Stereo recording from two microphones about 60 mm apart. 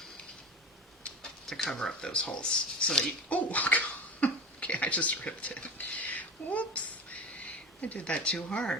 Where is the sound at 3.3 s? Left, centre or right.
Left.